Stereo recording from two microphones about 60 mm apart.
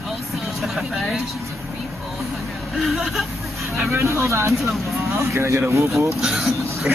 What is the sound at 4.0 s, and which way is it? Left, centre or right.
Speech, right.